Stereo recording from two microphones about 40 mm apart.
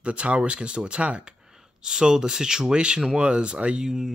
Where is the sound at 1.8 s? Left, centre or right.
Centre.